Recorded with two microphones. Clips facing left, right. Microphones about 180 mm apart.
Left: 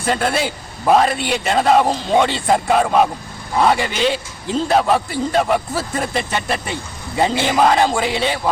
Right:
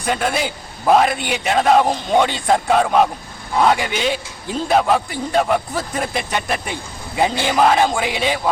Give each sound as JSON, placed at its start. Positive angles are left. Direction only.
{"t": 0.0, "sound": "speech", "side_deg": 0}